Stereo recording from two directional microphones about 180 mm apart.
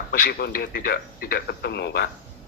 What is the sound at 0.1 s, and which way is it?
Speech, 55° left (ahead or behind).